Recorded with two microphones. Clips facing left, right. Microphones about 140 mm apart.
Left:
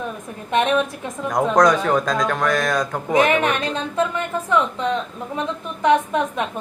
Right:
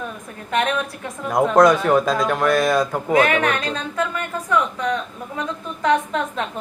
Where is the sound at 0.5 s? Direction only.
20° left (ahead or behind).